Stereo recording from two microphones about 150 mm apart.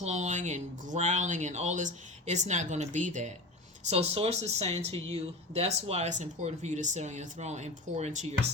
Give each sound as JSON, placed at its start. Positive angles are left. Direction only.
{"t": 0.0, "sound": "speech", "side_deg": -50}
{"t": 3.8, "sound": "speech", "side_deg": -45}